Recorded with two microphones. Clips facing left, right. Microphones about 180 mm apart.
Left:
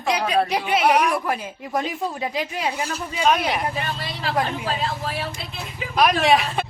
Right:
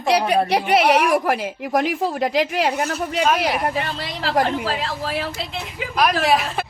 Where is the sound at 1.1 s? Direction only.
80° right.